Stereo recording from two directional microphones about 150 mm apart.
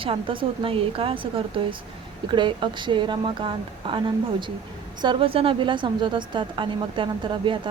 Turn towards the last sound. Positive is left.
turn(degrees=-30)  # may be behind; listen again after turning